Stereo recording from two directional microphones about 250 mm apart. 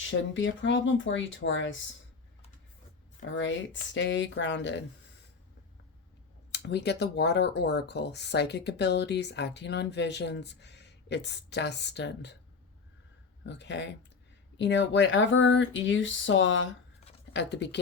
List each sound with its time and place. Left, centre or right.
0.0 s speech: left
3.2 s speech: left
6.5 s speech: left
13.4 s speech: left